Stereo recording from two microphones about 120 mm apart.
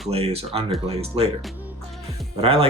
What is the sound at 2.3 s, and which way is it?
Speech, 55° right (ahead or behind).